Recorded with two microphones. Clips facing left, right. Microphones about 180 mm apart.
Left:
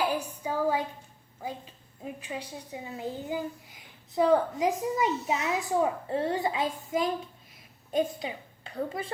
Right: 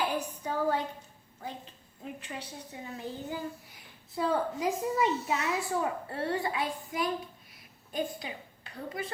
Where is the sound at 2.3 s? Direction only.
10° left (ahead or behind).